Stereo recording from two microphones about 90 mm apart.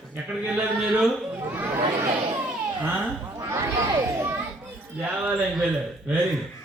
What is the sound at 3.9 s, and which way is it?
Children playing, 35° right (ahead or behind).